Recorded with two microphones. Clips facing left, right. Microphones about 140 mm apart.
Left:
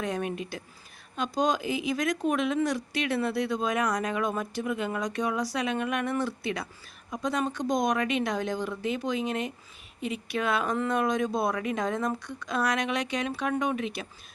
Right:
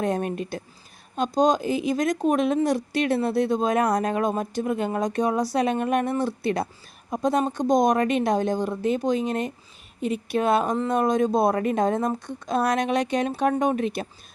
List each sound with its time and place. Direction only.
0.0 s speech: 45° right (ahead or behind)